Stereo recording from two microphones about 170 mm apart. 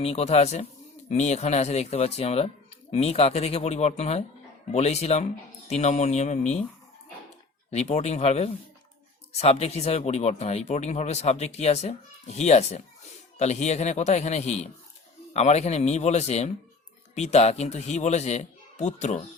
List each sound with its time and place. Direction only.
0.0 s speech: 35° left (ahead or behind)
7.7 s speech: 40° left (ahead or behind)